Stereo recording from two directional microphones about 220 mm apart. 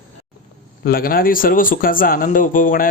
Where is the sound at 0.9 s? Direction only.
40° left (ahead or behind).